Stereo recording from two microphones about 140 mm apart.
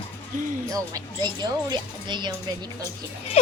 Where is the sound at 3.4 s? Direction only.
50° left (ahead or behind).